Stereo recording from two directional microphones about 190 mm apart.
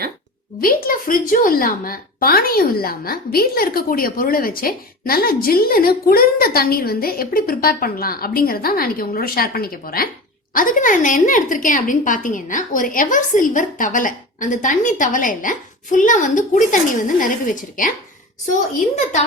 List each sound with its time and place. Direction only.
0.6 s a woman's voice: 50° left (ahead or behind)